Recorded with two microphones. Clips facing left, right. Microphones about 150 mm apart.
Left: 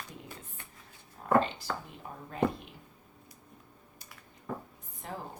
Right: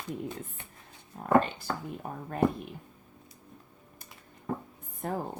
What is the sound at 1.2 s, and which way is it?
A woman's voice, 50° right (ahead or behind).